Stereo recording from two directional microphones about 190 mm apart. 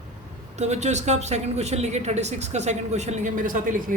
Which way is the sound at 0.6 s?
35° right (ahead or behind).